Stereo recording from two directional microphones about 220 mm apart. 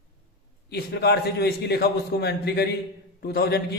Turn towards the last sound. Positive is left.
turn(degrees=45)  # may be behind; listen again after turning